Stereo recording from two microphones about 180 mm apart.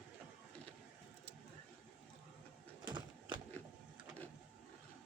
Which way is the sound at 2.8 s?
25° right (ahead or behind).